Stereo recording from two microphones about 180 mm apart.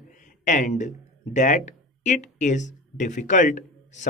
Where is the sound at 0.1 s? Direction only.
45° left (ahead or behind).